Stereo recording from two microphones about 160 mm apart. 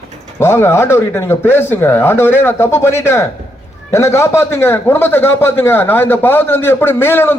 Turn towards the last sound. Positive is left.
turn(degrees=15)  # may be behind; listen again after turning